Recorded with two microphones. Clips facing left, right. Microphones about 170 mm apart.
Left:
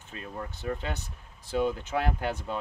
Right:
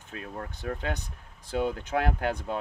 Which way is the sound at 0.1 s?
70° right (ahead or behind).